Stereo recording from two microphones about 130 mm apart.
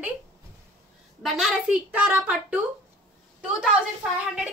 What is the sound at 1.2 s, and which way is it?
A child's voice, 5° right (ahead or behind).